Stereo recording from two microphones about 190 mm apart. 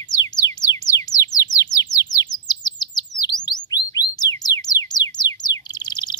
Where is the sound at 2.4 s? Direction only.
20° left (ahead or behind).